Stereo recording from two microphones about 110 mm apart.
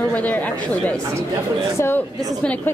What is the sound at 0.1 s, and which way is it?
Speech, 15° left (ahead or behind).